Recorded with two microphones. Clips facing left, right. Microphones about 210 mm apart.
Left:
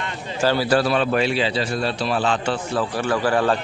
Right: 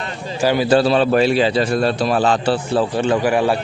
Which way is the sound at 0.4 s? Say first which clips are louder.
Right 4 dB; 15° right (ahead or behind).